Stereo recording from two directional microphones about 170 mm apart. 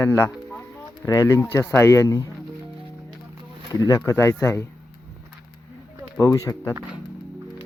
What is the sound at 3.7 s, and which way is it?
Speech, 20° left (ahead or behind).